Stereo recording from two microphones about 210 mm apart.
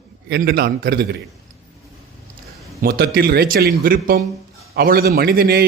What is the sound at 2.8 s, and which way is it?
A man's voice, 45° right (ahead or behind).